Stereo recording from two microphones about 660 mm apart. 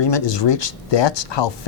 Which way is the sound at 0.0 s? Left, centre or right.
Left.